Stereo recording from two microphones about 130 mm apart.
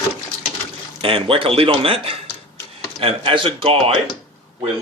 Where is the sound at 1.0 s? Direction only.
45° right (ahead or behind).